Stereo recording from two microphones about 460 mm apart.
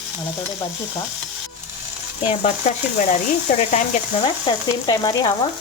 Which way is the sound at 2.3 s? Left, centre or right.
Centre.